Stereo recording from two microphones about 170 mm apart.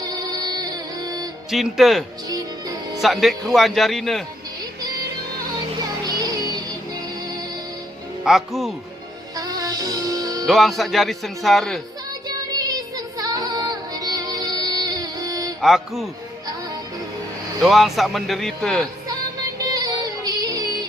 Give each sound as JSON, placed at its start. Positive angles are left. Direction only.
{"t": 0.0, "sound": "music", "side_deg": -20}
{"t": 1.5, "sound": "speech", "side_deg": 0}
{"t": 2.3, "sound": "music", "side_deg": -20}
{"t": 3.0, "sound": "speech", "side_deg": 0}
{"t": 6.1, "sound": "music", "side_deg": -20}
{"t": 8.2, "sound": "speech", "side_deg": 0}
{"t": 9.3, "sound": "music", "side_deg": -20}
{"t": 10.4, "sound": "speech", "side_deg": 0}
{"t": 12.5, "sound": "music", "side_deg": -25}
{"t": 15.6, "sound": "speech", "side_deg": 0}
{"t": 17.6, "sound": "speech", "side_deg": 0}
{"t": 19.5, "sound": "music", "side_deg": -20}